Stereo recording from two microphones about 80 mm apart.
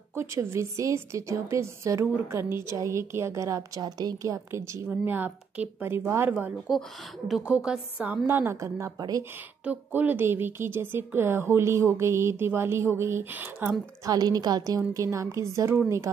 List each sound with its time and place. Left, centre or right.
0.1 s a woman's voice: right
3.8 s a woman's voice: right
5.0 s a woman's voice: right
6.7 s a woman's voice: centre; by 8.9 s right
8.9 s a woman's voice: right
9.7 s a woman's voice: right
14.0 s a woman's voice: right